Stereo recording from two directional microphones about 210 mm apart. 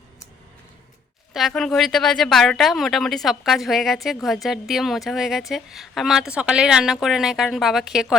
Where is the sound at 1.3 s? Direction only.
Centre (ahead or behind).